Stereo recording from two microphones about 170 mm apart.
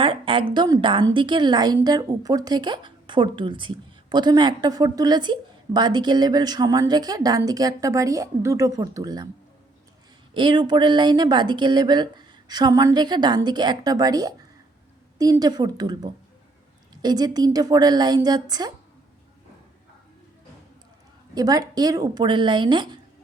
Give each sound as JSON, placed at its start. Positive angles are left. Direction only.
{"t": 0.0, "sound": "a woman's voice", "side_deg": -30}
{"t": 10.3, "sound": "a woman's voice", "side_deg": -30}
{"t": 21.3, "sound": "a woman's voice", "side_deg": -20}